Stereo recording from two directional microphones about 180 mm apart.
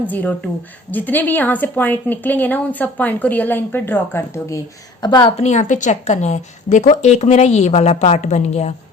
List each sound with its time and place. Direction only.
0.1 s speech: 10° left (ahead or behind); by 5.3 s 25° left (ahead or behind)
5.4 s a woman's voice: 40° left (ahead or behind)